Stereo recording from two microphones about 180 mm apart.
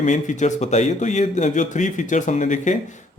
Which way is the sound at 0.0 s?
40° left (ahead or behind).